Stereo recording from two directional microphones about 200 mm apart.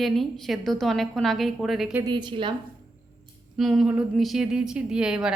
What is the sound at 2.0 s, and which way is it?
Speech, 25° right (ahead or behind).